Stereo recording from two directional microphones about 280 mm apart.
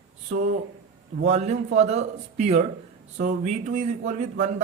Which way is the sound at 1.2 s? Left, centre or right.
Right.